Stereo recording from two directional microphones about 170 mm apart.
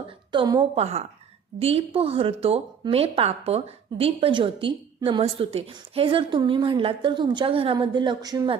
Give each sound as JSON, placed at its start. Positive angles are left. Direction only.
{"t": 0.3, "sound": "a woman's voice", "side_deg": -25}
{"t": 0.8, "sound": "a woman's voice", "side_deg": -40}